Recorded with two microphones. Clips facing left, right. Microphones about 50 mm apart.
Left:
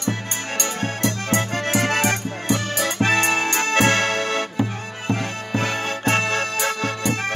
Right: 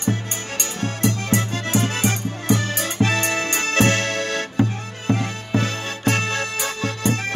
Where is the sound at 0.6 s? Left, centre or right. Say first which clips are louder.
Even; left.